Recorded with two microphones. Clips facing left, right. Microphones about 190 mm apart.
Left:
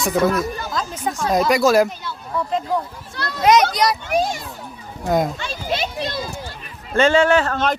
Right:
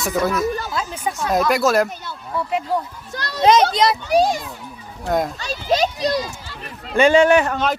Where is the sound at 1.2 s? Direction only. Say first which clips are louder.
Left 2 dB; centre (ahead or behind).